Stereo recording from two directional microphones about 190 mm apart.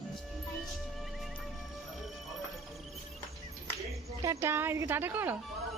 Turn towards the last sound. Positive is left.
turn(degrees=-10)  # may be behind; listen again after turning